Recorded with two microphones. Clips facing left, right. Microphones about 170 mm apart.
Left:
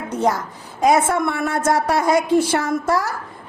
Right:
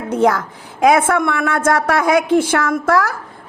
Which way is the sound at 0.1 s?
60° right (ahead or behind).